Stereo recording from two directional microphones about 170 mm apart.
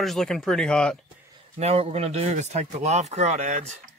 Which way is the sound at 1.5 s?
35° right (ahead or behind).